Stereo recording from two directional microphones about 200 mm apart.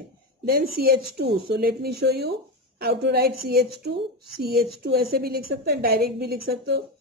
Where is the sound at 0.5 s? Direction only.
50° right (ahead or behind).